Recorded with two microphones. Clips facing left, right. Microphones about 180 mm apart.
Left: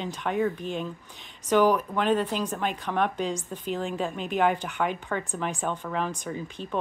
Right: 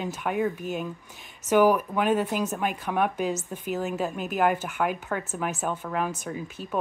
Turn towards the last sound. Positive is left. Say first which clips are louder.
# even
turn(degrees=-5)  # may be behind; listen again after turning